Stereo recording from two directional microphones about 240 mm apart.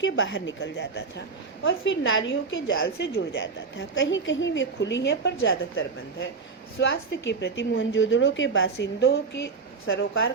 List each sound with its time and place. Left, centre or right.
0.0 s a woman's voice: left